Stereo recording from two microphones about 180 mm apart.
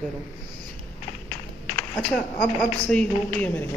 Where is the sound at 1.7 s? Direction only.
Centre (ahead or behind).